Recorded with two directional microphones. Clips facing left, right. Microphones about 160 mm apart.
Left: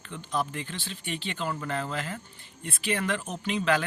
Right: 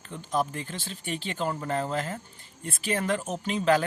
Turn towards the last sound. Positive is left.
turn(degrees=-40)  # may be behind; listen again after turning